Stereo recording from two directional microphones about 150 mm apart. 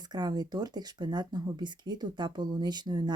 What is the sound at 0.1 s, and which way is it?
Speech, 25° right (ahead or behind).